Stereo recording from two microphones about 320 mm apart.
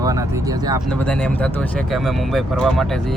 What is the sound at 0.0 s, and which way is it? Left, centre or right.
Speech, centre.